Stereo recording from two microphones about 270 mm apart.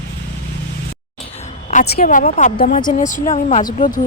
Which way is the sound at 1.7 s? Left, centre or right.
Left.